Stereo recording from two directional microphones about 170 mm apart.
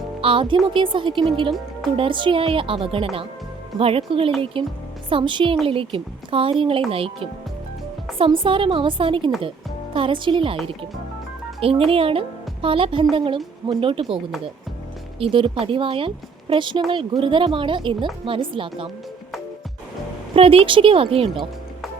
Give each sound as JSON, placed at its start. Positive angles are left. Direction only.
{"t": 0.2, "sound": "a woman's voice", "side_deg": -30}
{"t": 11.6, "sound": "speech", "side_deg": -35}
{"t": 15.2, "sound": "a woman's voice", "side_deg": -30}
{"t": 20.3, "sound": "speech", "side_deg": -35}